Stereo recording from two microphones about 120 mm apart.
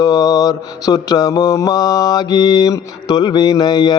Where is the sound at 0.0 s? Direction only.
30° left (ahead or behind).